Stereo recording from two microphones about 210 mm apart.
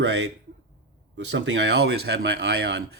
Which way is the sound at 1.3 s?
55° right (ahead or behind).